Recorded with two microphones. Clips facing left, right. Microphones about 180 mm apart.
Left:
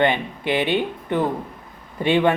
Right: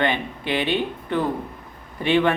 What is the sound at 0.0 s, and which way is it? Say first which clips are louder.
Speech: left 3 dB; 20° left (ahead or behind).